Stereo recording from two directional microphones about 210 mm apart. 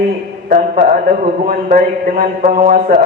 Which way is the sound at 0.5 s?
45° right (ahead or behind).